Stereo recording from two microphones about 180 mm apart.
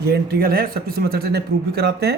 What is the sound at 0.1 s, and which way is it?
A man's voice, 55° right (ahead or behind).